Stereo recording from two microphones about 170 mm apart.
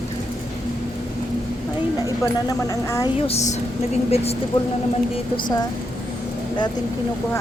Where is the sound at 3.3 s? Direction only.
40° left (ahead or behind).